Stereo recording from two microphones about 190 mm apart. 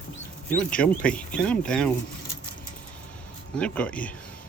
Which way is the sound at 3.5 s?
5° left (ahead or behind).